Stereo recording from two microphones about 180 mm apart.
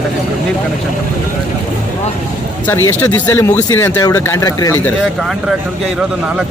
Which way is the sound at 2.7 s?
15° left (ahead or behind).